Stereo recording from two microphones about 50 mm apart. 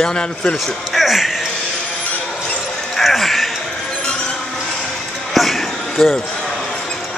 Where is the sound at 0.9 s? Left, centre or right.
Centre.